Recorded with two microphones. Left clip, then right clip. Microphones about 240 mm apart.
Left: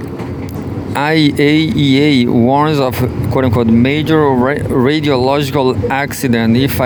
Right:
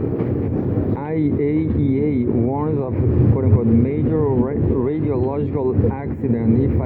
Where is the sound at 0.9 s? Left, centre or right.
Left.